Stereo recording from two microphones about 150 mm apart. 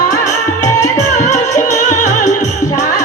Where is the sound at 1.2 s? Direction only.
55° left (ahead or behind).